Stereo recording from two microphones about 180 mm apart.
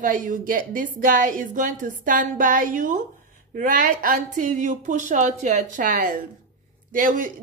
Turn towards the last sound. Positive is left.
turn(degrees=-50)  # may be behind; listen again after turning